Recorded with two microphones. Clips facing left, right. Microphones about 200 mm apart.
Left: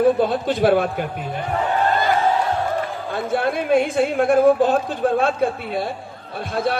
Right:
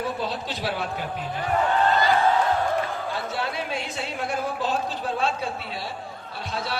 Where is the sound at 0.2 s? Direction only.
50° left (ahead or behind).